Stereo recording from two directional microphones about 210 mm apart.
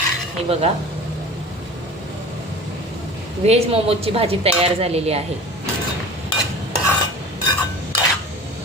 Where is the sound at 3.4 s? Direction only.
30° right (ahead or behind).